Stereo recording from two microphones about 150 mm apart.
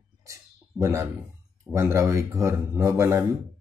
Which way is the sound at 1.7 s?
15° right (ahead or behind).